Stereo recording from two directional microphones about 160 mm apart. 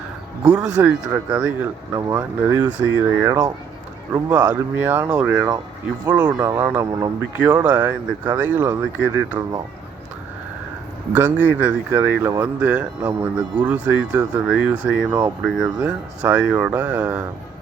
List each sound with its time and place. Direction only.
0.5 s speech: 5° right (ahead or behind)
4.1 s speech: 10° right (ahead or behind)
6.1 s speech: 25° right (ahead or behind)
11.1 s speech: 10° right (ahead or behind)